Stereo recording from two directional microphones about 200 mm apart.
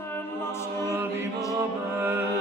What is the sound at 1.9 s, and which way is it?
Music, 10° right (ahead or behind).